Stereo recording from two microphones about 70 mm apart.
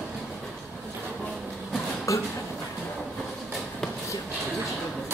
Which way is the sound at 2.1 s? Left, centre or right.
Left.